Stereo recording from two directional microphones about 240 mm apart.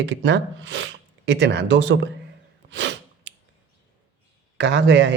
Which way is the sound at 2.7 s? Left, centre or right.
Right.